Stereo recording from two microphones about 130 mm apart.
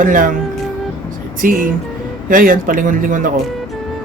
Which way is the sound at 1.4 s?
90° right.